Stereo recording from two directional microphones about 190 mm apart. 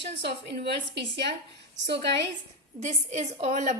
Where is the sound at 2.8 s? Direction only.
35° right (ahead or behind).